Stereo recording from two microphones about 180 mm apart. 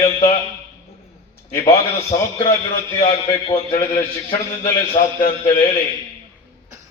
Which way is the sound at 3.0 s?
30° left (ahead or behind).